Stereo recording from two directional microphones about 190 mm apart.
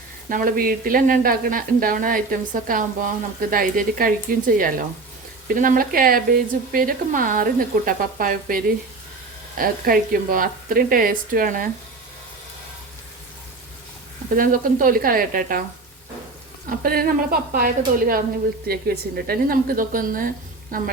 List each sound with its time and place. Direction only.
0.3 s speech: 45° right (ahead or behind)
14.3 s speech: 45° right (ahead or behind)
16.6 s speech: 50° right (ahead or behind)